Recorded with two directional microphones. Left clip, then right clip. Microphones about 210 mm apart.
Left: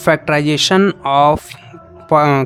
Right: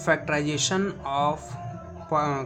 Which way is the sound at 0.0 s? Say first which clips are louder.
Left 10 dB; 50° left (ahead or behind).